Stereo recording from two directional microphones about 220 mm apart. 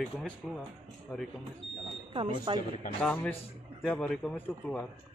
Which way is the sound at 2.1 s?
25° right (ahead or behind).